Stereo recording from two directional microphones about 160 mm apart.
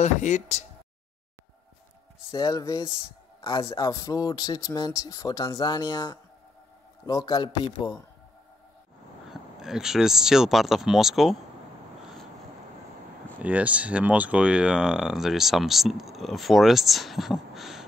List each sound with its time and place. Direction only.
0.0 s speech: 45° left (ahead or behind)
2.3 s speech: 20° left (ahead or behind)
9.3 s speech: 5° right (ahead or behind)
13.4 s speech: 10° right (ahead or behind)